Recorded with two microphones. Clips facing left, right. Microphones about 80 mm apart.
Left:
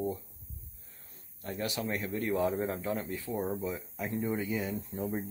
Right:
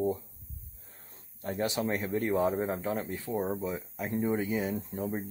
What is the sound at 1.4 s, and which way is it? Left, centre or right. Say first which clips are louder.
Speech: right 4 dB; right.